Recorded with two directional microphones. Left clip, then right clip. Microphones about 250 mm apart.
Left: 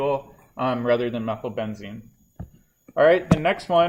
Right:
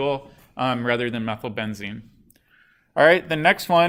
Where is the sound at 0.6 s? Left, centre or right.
Right.